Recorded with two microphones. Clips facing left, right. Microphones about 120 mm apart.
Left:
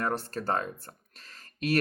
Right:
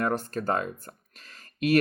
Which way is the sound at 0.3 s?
35° left (ahead or behind).